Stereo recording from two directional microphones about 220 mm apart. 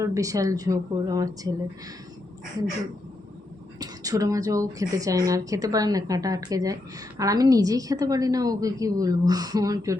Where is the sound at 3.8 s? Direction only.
15° right (ahead or behind).